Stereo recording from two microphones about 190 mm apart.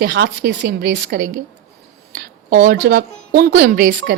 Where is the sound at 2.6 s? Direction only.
55° right (ahead or behind).